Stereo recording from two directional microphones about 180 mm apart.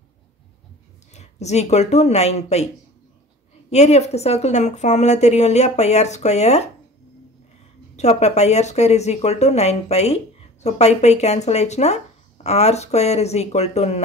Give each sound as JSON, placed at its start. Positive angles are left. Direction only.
{"t": 1.1, "sound": "speech", "side_deg": 40}
{"t": 3.7, "sound": "speech", "side_deg": 40}
{"t": 7.9, "sound": "speech", "side_deg": 40}